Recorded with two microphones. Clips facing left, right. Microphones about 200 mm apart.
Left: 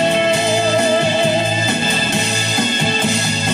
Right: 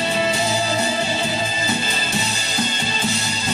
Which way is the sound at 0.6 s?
75° left (ahead or behind).